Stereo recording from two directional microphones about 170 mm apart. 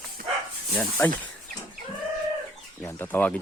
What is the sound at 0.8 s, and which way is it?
Speech, 10° left (ahead or behind).